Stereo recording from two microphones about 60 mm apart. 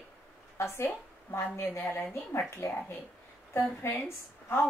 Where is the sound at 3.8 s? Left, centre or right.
Left.